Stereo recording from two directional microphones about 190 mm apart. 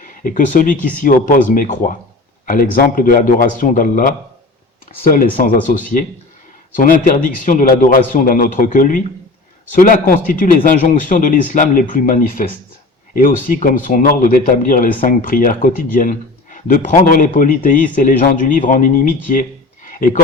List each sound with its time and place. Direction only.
0.0 s speech: 45° left (ahead or behind)
5.1 s speech: 45° left (ahead or behind)